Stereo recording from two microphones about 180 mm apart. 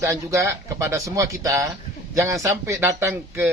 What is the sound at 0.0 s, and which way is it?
A man's voice, 15° right (ahead or behind).